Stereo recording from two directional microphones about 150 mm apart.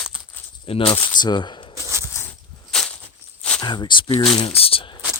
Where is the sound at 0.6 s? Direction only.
40° left (ahead or behind).